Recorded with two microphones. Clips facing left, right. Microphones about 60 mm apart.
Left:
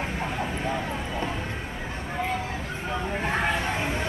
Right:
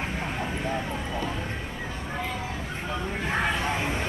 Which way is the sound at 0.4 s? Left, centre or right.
Centre.